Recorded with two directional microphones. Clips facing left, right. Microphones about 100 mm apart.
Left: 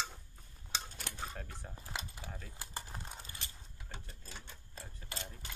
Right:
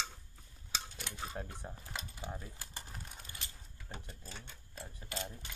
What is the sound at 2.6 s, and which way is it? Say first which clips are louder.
Typing: left 3 dB; 30° left (ahead or behind).